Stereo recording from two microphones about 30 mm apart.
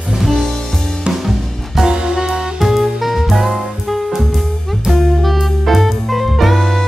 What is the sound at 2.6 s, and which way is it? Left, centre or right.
Music, centre.